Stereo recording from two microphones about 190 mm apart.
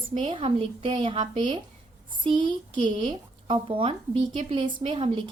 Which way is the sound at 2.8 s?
30° right (ahead or behind).